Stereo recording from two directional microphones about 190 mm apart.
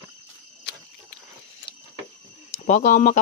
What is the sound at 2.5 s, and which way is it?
Speech, 40° left (ahead or behind).